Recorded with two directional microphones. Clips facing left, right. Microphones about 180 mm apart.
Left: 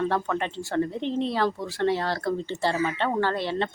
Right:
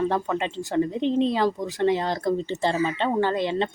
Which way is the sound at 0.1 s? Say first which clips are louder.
Right 1 dB; 15° right (ahead or behind).